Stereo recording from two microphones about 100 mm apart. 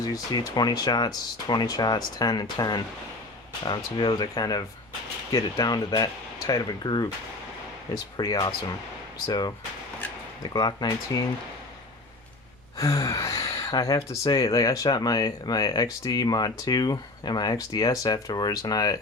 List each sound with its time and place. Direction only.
0.0 s speech: 40° left (ahead or behind)
12.7 s speech: 35° left (ahead or behind)